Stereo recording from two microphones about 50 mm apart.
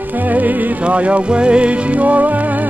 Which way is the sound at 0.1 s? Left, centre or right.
Right.